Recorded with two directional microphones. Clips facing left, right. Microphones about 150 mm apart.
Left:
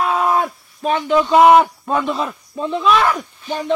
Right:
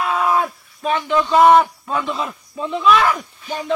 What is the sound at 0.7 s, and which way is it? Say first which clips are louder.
Speech: left 2 dB; 40° left (ahead or behind).